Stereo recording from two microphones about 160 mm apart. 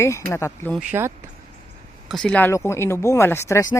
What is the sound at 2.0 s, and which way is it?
Speech, 5° left (ahead or behind).